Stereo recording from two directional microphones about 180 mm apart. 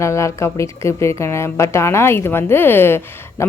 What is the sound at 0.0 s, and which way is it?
A woman's voice, 15° left (ahead or behind).